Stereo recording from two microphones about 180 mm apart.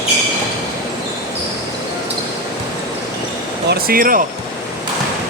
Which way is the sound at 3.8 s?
50° right (ahead or behind).